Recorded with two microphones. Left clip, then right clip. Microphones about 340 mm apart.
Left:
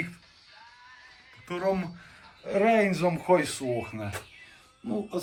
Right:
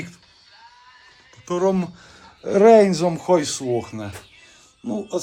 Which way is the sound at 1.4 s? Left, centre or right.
Centre.